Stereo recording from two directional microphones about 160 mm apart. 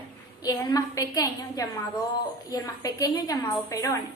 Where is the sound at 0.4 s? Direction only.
25° left (ahead or behind).